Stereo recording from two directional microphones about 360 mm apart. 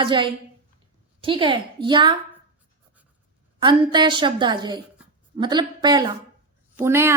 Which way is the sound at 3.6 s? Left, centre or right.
Centre.